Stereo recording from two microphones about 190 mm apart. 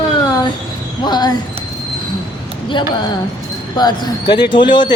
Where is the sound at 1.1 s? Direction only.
20° left (ahead or behind).